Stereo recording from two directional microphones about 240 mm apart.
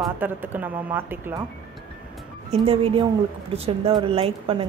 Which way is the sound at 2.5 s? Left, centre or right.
Right.